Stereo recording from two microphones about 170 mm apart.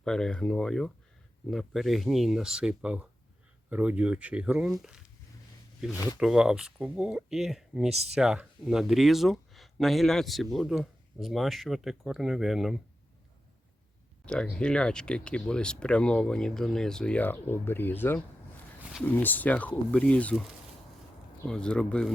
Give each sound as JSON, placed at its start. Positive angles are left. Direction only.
{"t": 0.0, "sound": "speech", "side_deg": 5}
{"t": 6.1, "sound": "speech", "side_deg": -5}
{"t": 7.9, "sound": "speech", "side_deg": -40}
{"t": 8.1, "sound": "speech", "side_deg": -5}
{"t": 14.5, "sound": "speech", "side_deg": 5}
{"t": 21.4, "sound": "speech", "side_deg": 5}